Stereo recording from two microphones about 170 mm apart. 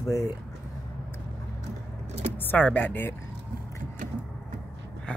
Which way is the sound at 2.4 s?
10° left (ahead or behind).